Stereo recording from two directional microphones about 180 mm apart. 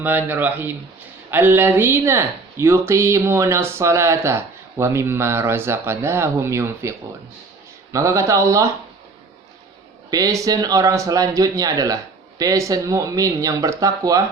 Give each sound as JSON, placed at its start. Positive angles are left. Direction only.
{"t": 0.0, "sound": "speech", "side_deg": -10}
{"t": 7.9, "sound": "speech", "side_deg": -15}
{"t": 10.1, "sound": "speech", "side_deg": -20}